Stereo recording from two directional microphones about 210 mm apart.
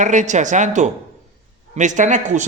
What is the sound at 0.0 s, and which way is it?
A man's voice, 35° right (ahead or behind).